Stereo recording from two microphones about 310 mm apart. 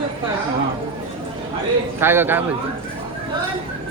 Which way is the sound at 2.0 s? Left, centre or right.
Centre.